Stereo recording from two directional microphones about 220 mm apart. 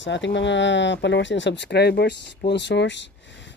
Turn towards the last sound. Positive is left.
turn(degrees=55)  # may be behind; listen again after turning